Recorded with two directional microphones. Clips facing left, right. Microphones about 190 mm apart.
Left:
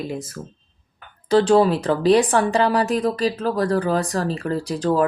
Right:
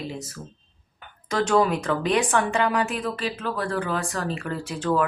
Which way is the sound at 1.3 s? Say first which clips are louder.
Left 6 dB; 30° left (ahead or behind).